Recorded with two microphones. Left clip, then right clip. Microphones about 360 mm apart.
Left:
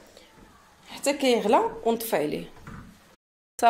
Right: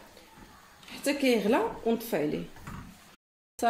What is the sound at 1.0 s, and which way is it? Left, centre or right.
Speech, left.